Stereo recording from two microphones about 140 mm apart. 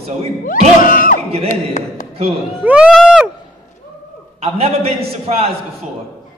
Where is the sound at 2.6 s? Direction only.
10° right (ahead or behind).